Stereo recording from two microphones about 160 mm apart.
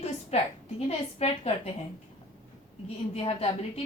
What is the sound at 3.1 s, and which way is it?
Speech, 40° left (ahead or behind).